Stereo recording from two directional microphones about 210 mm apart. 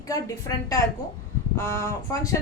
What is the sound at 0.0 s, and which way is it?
Speech, 15° left (ahead or behind).